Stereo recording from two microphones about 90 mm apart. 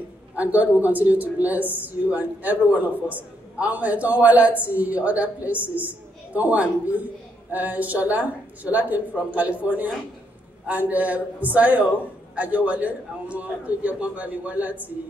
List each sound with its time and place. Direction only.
0.4 s speech: 15° right (ahead or behind)
10.7 s speech: 15° right (ahead or behind)